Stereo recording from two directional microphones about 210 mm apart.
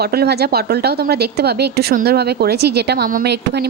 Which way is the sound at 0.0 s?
50° right (ahead or behind).